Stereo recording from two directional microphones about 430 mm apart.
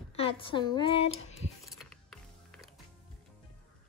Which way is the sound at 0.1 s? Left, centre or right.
Centre.